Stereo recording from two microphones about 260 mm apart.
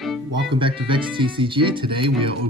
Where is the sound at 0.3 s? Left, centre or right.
Centre.